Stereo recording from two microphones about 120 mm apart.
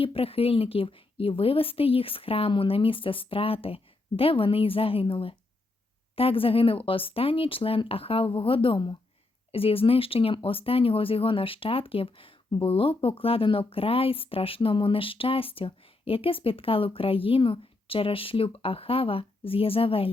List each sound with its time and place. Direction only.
0.0 s speech: 50° left (ahead or behind)